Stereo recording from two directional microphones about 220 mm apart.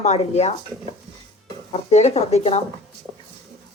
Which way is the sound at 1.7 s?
30° left (ahead or behind).